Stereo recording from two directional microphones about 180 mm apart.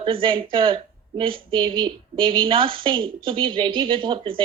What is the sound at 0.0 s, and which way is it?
A woman's voice, 30° right (ahead or behind).